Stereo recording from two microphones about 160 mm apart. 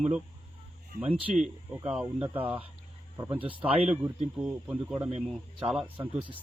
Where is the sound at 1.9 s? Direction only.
10° right (ahead or behind).